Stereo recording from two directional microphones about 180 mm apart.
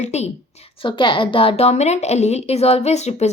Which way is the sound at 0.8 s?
25° left (ahead or behind).